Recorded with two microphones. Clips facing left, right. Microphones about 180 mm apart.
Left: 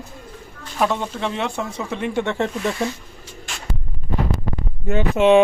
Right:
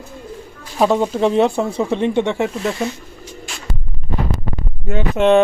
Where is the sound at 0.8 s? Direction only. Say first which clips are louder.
Right 7 dB; 35° right (ahead or behind).